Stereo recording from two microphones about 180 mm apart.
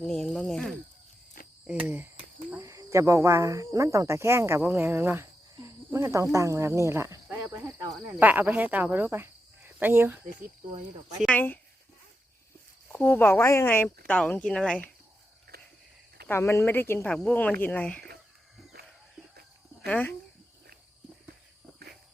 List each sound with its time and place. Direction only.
0.1 s speech: 5° left (ahead or behind); by 10.2 s 10° right (ahead or behind)
11.2 s speech: 10° left (ahead or behind)
12.9 s speech: 10° left (ahead or behind)
15.5 s walk: 60° right (ahead or behind)
16.3 s speech: 15° left (ahead or behind)
19.8 s speech: 5° left (ahead or behind)